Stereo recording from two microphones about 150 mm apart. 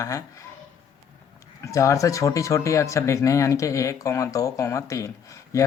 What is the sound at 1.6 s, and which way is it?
Speech, 20° left (ahead or behind).